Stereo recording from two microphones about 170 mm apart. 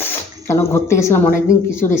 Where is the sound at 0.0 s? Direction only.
15° left (ahead or behind).